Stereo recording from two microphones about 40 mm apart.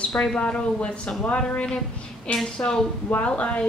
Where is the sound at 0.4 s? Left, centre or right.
Left.